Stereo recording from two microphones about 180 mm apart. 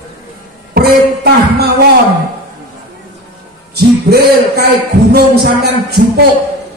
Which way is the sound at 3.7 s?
60° right (ahead or behind).